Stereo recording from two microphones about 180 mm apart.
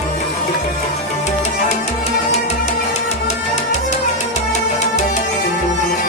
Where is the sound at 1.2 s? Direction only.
40° left (ahead or behind).